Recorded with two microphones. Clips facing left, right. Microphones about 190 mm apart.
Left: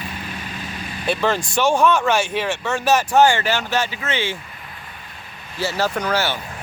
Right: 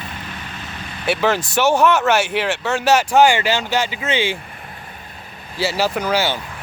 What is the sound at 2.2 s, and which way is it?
Speech, 75° right (ahead or behind).